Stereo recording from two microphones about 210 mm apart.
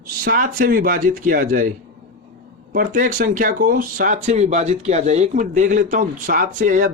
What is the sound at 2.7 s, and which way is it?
Speech, 40° right (ahead or behind).